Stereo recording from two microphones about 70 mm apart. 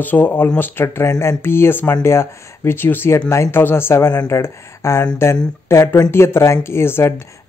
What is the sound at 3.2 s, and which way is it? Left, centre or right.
Speech, left.